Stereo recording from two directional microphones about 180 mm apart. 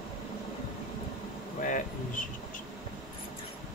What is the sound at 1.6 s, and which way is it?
Speech, 45° left (ahead or behind).